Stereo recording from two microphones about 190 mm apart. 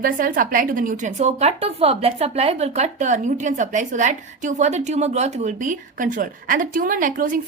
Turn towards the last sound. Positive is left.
turn(degrees=-45)  # may be behind; listen again after turning